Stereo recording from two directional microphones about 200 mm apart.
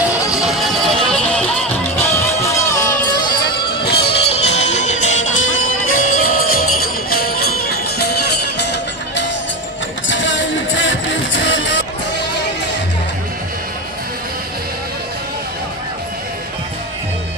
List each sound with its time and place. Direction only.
0.3 s music: centre (ahead or behind)
2.4 s music: 15° left (ahead or behind)
3.9 s music: 30° left (ahead or behind); by 11.8 s 65° left (ahead or behind)